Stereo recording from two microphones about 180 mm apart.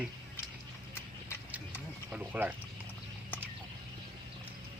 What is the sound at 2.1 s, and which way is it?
Speech, 5° right (ahead or behind).